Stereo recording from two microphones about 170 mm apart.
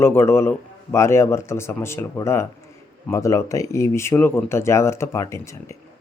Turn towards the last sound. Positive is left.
turn(degrees=15)  # may be behind; listen again after turning